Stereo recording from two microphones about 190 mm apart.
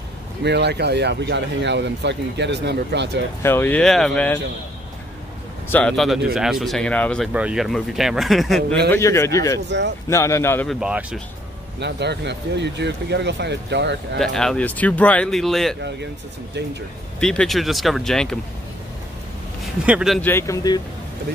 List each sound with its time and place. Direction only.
0.4 s speech: 65° right (ahead or behind)
3.4 s speech: 10° left (ahead or behind)
5.7 s speech: 5° left (ahead or behind)
7.3 s speech: 5° right (ahead or behind)
8.9 s speech: 15° left (ahead or behind)
9.7 s speech: 65° right (ahead or behind)
10.0 s speech: 15° left (ahead or behind)
10.7 s speech: 5° right (ahead or behind)
11.8 s speech: 65° right (ahead or behind)
14.1 s speech: centre (ahead or behind)
17.2 s speech: 5° left (ahead or behind)
19.6 s speech: centre (ahead or behind)
20.2 s speech: 10° left (ahead or behind)